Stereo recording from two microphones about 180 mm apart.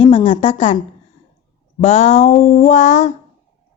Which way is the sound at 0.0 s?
30° left (ahead or behind).